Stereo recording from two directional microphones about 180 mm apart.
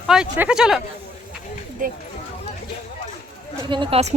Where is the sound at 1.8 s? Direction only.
50° right (ahead or behind).